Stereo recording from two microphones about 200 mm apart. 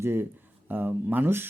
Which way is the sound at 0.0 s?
10° right (ahead or behind).